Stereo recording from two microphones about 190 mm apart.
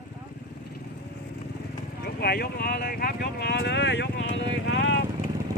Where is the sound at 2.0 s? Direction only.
55° left (ahead or behind); by 4.8 s 70° left (ahead or behind).